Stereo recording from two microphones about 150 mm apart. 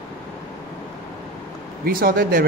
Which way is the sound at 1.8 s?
80° right.